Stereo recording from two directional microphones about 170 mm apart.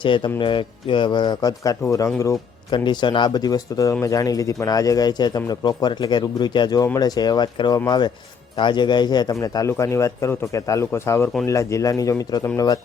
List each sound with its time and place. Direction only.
0.0 s speech: 30° left (ahead or behind)